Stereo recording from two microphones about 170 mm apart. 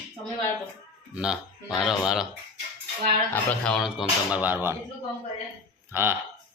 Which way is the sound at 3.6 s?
Centre (ahead or behind).